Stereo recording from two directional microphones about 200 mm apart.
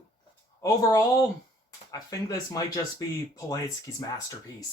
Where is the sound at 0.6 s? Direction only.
20° left (ahead or behind).